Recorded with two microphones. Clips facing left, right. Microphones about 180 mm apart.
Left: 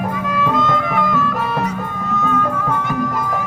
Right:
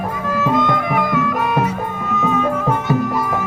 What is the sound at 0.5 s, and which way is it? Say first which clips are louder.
Music: right 3 dB; 15° right (ahead or behind).